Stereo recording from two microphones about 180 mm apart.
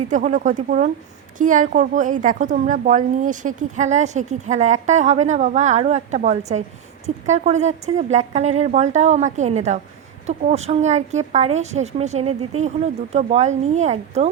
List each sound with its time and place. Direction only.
0.1 s a woman's voice: 45° right (ahead or behind)